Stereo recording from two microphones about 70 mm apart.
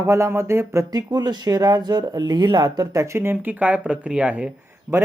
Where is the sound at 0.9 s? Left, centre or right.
Right.